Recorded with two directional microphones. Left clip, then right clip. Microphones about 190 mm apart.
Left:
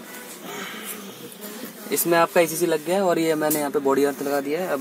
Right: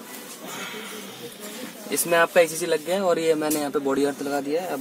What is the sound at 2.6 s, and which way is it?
Speech, 25° left (ahead or behind).